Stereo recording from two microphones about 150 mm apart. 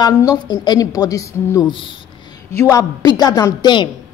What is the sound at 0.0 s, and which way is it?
A woman's voice, 25° left (ahead or behind).